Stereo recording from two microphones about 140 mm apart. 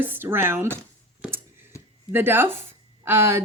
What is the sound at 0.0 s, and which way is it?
Speech, 15° right (ahead or behind).